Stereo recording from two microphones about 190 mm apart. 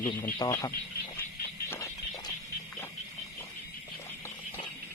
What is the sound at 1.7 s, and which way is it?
Music, 15° left (ahead or behind).